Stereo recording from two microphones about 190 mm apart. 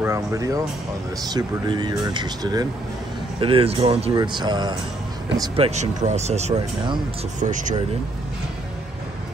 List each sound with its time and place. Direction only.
0.0 s speech: 15° right (ahead or behind)
5.4 s speech: 35° right (ahead or behind)